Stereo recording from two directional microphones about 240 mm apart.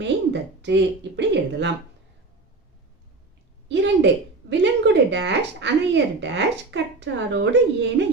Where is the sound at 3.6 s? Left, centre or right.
Right.